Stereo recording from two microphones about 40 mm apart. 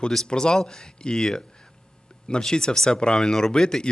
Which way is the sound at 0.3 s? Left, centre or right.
Left.